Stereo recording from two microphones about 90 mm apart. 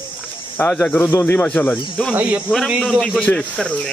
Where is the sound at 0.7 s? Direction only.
10° left (ahead or behind).